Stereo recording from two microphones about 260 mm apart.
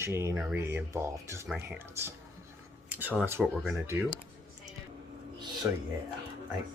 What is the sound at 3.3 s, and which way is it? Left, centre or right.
Speech, centre.